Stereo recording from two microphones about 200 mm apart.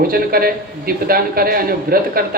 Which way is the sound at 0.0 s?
50° right (ahead or behind).